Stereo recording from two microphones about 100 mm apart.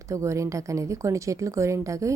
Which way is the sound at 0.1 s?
30° right (ahead or behind).